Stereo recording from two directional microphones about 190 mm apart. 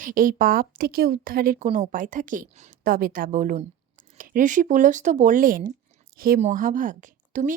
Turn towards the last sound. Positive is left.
turn(degrees=-45)  # may be behind; listen again after turning